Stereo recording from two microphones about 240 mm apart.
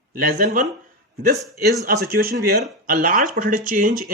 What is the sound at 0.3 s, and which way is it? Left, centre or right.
Speech, right.